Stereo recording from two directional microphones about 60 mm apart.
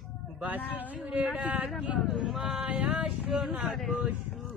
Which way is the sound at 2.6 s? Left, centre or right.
Right.